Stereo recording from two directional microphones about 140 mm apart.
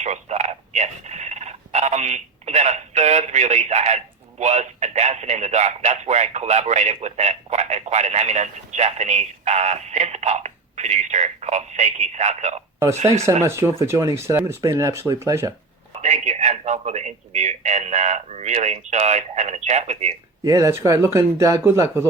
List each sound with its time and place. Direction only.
0.0 s telephone: 55° right (ahead or behind)
13.2 s speech: 20° right (ahead or behind)
16.0 s a sound: 55° right (ahead or behind)
20.4 s speech: 20° right (ahead or behind)